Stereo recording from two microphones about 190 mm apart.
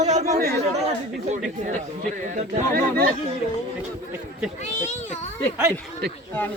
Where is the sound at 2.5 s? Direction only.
50° right (ahead or behind).